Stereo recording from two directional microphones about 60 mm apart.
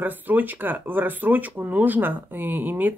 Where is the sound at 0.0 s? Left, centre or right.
Right.